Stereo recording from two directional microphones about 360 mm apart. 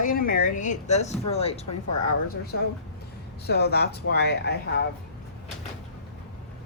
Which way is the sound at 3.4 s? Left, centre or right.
Left.